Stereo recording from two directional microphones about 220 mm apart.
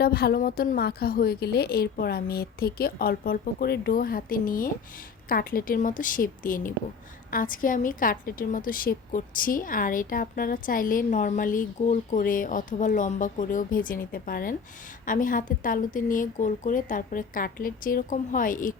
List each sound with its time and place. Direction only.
0.0 s a woman's voice: 45° left (ahead or behind)